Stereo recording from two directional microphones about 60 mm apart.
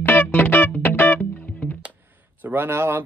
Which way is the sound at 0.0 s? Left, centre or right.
Left.